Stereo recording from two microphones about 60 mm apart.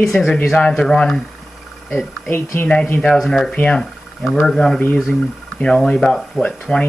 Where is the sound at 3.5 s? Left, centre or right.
Centre.